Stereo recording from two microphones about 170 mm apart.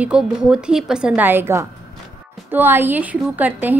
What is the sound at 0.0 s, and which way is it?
A woman's voice, 5° right (ahead or behind).